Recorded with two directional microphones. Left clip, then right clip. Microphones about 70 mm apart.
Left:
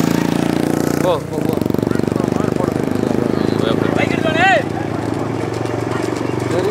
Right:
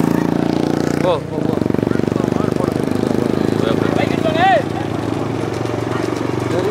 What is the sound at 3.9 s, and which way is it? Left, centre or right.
Horse, left.